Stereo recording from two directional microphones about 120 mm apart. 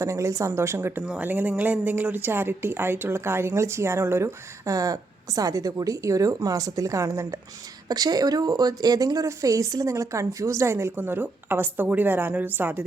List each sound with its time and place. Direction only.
0.0 s speech: 25° right (ahead or behind)